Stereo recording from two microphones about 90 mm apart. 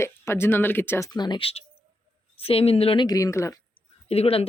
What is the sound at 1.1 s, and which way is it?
Speech, 55° left (ahead or behind).